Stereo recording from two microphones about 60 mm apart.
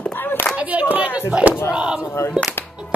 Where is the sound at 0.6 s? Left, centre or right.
Right.